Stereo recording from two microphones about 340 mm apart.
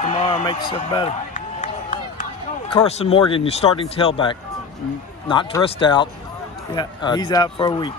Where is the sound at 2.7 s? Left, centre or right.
Centre.